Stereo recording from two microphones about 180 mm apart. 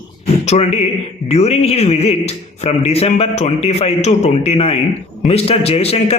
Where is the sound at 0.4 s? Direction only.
35° left (ahead or behind).